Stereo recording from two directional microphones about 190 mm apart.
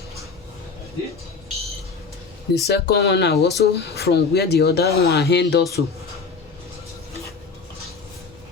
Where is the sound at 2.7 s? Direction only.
60° left (ahead or behind).